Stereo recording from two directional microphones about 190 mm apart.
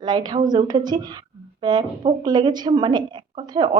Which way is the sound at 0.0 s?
20° right (ahead or behind).